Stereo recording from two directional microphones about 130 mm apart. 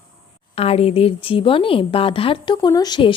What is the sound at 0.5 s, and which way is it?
Speech, 50° left (ahead or behind).